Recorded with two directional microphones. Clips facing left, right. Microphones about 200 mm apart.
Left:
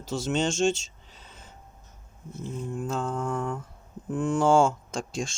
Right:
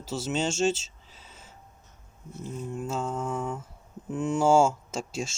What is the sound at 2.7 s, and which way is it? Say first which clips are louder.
Speech: left 1 dB; 5° right (ahead or behind).